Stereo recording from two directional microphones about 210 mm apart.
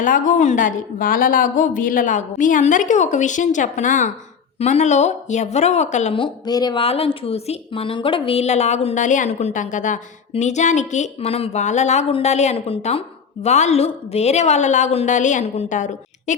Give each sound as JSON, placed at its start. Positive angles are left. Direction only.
{"t": 0.0, "sound": "speech", "side_deg": 40}